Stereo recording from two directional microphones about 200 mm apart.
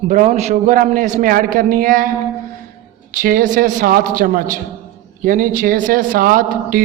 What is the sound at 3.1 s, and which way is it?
A man's voice, 45° right (ahead or behind).